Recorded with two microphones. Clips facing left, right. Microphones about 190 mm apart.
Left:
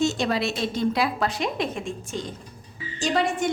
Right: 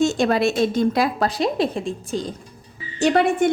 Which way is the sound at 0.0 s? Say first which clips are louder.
Right 5 dB; 50° right (ahead or behind).